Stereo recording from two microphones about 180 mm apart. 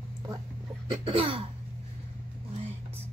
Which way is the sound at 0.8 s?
30° right (ahead or behind).